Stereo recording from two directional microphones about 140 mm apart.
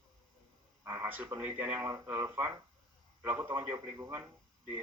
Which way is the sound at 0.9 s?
15° right (ahead or behind).